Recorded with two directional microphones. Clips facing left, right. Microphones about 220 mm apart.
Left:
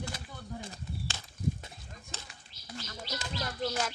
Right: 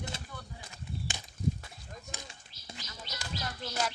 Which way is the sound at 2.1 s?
15° right (ahead or behind).